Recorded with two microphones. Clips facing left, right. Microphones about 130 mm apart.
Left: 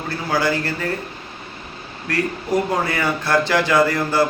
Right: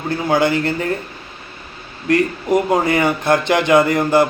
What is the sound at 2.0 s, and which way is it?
Speech, 20° right (ahead or behind).